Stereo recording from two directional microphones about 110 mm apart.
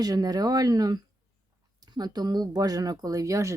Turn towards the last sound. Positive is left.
turn(degrees=-30)  # may be behind; listen again after turning